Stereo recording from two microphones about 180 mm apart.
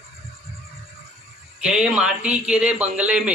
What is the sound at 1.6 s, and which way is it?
A man's voice, 5° right (ahead or behind).